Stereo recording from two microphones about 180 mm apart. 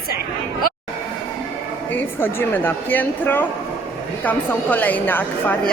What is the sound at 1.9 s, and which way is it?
Speech, 10° left (ahead or behind).